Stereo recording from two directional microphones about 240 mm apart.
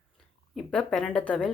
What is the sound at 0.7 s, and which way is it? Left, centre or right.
Speech, centre.